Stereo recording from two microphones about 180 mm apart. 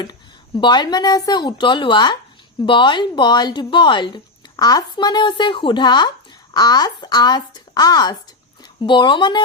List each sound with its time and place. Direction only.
0.6 s speech: 25° left (ahead or behind)